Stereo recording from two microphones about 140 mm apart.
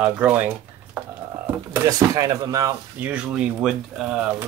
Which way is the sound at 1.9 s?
25° right (ahead or behind).